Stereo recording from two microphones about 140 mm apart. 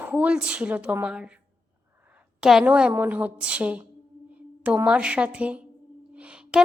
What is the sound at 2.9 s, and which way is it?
A woman's voice, 15° right (ahead or behind).